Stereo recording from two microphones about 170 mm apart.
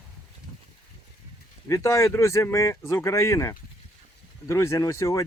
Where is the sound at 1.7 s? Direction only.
15° left (ahead or behind).